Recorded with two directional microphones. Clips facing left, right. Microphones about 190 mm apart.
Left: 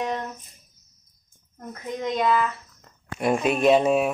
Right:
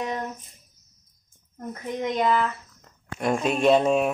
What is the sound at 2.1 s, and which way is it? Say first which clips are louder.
Speech: left 1 dB; 15° right (ahead or behind).